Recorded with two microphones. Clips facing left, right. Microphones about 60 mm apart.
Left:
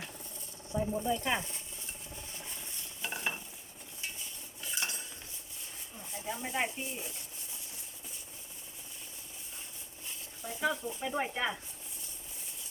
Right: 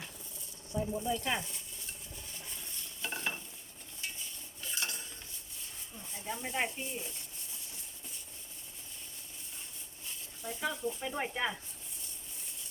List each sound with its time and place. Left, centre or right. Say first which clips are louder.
0.7 s speech: left 2 dB; centre
3.0 s stir: left 1 dB; centre
4.7 s cutlery: left 1 dB; centre
6.2 s speech: left 1 dB; centre
10.4 s speech: left 2 dB; centre